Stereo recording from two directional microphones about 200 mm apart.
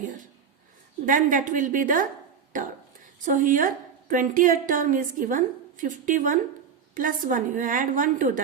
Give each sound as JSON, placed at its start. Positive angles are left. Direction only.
{"t": 1.0, "sound": "a woman's voice", "side_deg": -40}